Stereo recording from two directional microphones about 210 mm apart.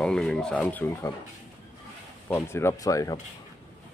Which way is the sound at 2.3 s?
10° left (ahead or behind).